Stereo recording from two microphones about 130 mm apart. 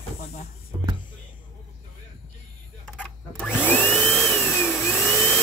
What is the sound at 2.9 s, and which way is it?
Vacuum cleaner, 5° left (ahead or behind).